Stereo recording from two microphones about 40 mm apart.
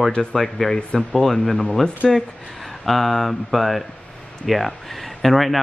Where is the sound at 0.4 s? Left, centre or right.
Centre.